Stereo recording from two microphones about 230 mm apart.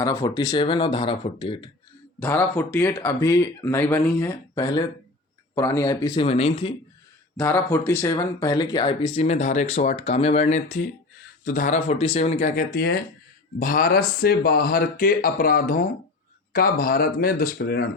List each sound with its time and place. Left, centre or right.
0.0 s speech: centre
2.2 s speech: centre; by 6.7 s left
7.3 s speech: centre; by 17.8 s left